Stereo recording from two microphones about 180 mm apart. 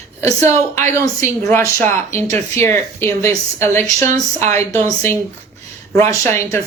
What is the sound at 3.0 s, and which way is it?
Speech, 15° left (ahead or behind).